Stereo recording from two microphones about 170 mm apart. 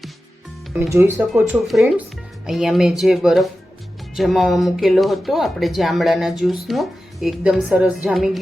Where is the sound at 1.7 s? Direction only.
Centre (ahead or behind).